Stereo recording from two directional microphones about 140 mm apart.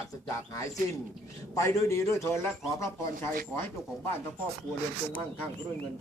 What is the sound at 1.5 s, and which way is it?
Speech, 20° left (ahead or behind).